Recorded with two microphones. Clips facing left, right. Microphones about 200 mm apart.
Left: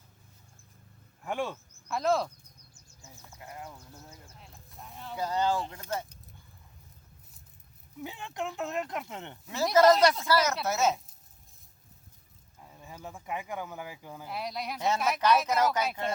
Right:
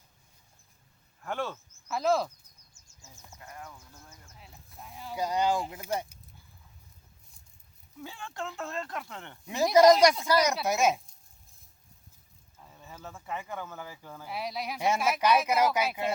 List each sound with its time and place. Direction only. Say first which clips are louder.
1.2 s speech: left 1 dB; 15° left (ahead or behind)
1.9 s speech: right 1 dB; centre (ahead or behind)
3.4 s speech: left 2 dB; 20° left (ahead or behind)
4.4 s sheep: even; centre (ahead or behind)
5.1 s speech: right 1 dB; 15° right (ahead or behind)
8.0 s speech: left 3 dB; 20° left (ahead or behind)
9.7 s speech: right 2 dB; 15° right (ahead or behind)
12.6 s speech: left 1 dB; 10° left (ahead or behind)
14.3 s speech: right 1 dB; centre (ahead or behind)